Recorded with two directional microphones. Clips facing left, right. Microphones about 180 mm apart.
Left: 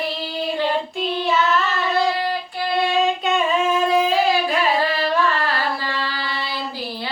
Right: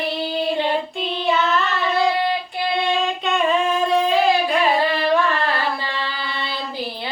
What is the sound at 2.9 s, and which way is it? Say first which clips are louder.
Singing: left 2 dB; centre (ahead or behind).